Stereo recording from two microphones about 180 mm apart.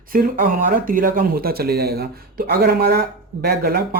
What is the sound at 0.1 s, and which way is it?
Speech, 50° right (ahead or behind).